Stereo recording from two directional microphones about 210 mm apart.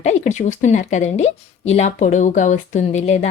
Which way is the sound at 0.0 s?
35° left (ahead or behind).